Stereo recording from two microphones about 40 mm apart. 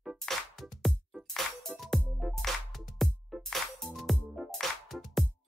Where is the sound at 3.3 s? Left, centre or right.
Centre.